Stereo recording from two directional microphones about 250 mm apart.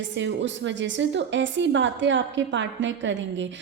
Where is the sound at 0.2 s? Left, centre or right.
Right.